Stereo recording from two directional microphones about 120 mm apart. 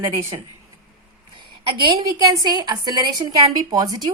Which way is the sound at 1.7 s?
30° right (ahead or behind).